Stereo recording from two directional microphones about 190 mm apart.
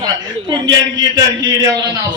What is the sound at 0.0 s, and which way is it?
A man's voice, 20° right (ahead or behind).